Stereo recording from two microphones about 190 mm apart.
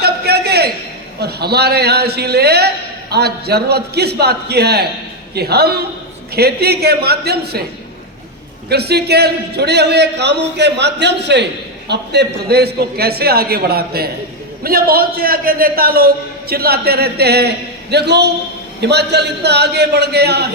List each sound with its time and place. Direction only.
0.0 s a sound: 60° right (ahead or behind)
1.2 s a man's voice: 55° right (ahead or behind)
8.7 s a man's voice: 60° right (ahead or behind)